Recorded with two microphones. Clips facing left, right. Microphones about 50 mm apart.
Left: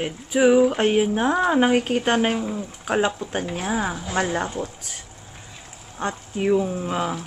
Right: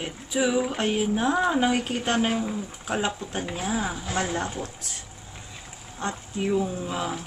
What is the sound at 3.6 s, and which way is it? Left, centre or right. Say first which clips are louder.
Speech: left 2 dB; left.